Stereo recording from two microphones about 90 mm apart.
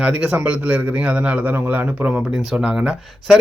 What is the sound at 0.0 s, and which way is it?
A man's voice, 10° right (ahead or behind).